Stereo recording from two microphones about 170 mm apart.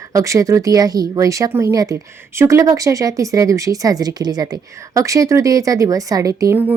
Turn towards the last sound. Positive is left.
turn(degrees=-15)  # may be behind; listen again after turning